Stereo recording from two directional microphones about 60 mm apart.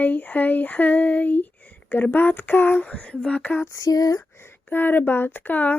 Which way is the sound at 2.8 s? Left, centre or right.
Left.